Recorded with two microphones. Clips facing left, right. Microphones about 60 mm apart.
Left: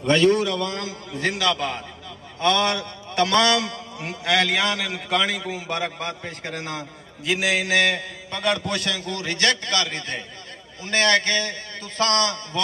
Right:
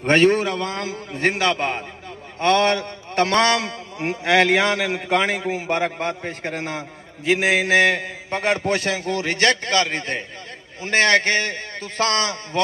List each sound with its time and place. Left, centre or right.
0.0 s a man's voice: right
7.3 s a man's voice: right